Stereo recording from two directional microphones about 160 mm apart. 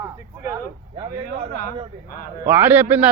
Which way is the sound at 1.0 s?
55° right (ahead or behind).